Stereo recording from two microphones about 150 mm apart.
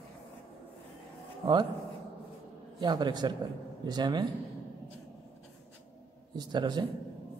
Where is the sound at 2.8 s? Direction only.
30° right (ahead or behind).